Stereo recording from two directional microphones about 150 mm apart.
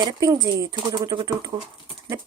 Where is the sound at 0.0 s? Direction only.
30° right (ahead or behind).